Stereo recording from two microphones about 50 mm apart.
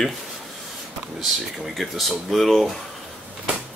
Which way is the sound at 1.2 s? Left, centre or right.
Centre.